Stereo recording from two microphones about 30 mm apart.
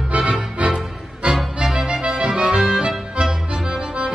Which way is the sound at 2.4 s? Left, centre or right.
Centre.